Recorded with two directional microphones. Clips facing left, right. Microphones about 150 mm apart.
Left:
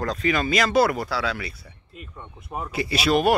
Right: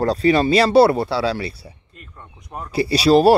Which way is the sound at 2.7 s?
35° right (ahead or behind).